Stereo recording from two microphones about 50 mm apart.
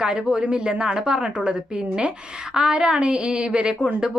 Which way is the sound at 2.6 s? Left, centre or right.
Centre.